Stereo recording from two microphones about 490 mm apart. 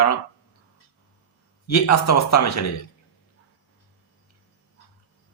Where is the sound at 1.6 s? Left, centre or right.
Left.